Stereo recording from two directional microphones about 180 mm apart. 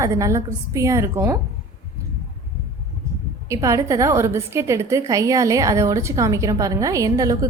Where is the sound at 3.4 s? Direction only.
15° right (ahead or behind).